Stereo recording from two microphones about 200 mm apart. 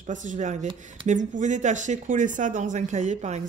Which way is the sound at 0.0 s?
40° right (ahead or behind).